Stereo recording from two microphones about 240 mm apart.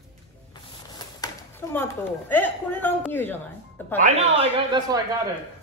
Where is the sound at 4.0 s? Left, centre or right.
Right.